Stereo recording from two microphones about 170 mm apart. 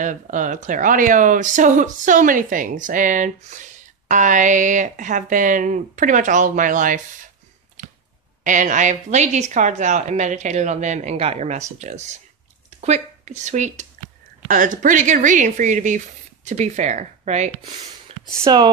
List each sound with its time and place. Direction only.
0.0 s speech: 50° right (ahead or behind)
8.5 s speech: 50° right (ahead or behind)
18.4 s speech: 25° right (ahead or behind)